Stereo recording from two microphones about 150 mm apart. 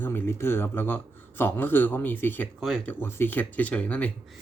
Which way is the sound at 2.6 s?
Centre (ahead or behind).